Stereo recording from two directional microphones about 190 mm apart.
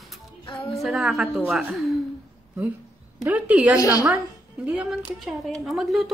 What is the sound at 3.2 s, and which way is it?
A woman's voice, 5° right (ahead or behind).